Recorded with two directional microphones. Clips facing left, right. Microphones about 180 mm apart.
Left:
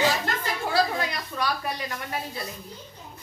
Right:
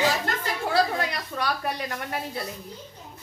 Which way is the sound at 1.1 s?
60° right (ahead or behind).